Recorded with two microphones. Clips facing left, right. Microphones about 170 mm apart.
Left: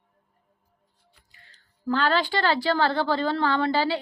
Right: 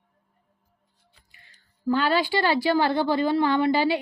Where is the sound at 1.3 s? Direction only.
15° right (ahead or behind).